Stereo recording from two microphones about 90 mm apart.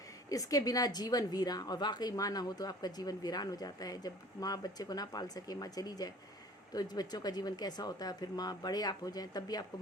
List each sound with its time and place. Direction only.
0.3 s a woman's voice: 40° left (ahead or behind)